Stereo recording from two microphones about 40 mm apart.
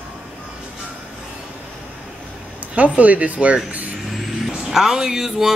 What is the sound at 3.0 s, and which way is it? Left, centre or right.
Speech, right.